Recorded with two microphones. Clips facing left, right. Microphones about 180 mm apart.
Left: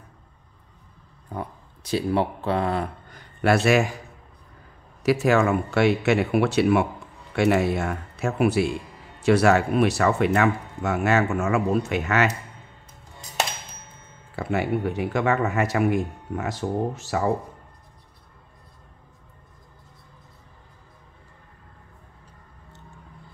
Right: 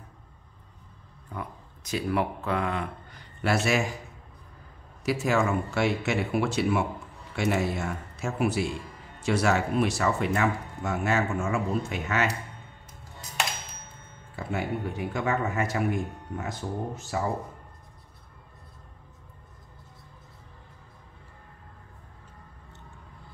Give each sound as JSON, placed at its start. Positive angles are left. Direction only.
{"t": 1.3, "sound": "speech", "side_deg": 30}
{"t": 3.2, "sound": "a sound", "side_deg": 60}
{"t": 5.0, "sound": "speech", "side_deg": 65}
{"t": 14.3, "sound": "speech", "side_deg": 75}